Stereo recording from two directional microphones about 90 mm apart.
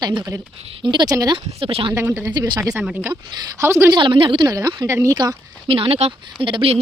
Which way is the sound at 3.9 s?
65° right (ahead or behind).